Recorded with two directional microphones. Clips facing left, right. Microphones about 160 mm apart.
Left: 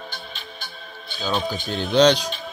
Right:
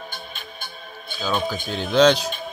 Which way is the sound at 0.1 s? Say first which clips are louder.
Even; 50° right (ahead or behind).